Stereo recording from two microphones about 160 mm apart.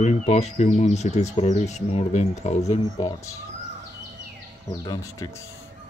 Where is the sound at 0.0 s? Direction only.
45° left (ahead or behind).